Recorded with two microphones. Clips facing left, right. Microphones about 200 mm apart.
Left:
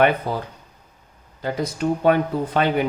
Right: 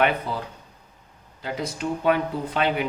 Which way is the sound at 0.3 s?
45° left (ahead or behind).